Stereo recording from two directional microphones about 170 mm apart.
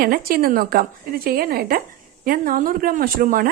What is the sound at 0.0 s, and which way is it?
Speech, 60° right (ahead or behind).